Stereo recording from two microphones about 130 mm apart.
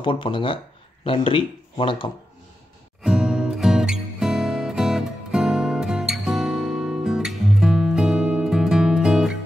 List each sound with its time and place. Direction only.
0.0 s speech: 40° left (ahead or behind)
3.0 s music: 5° right (ahead or behind)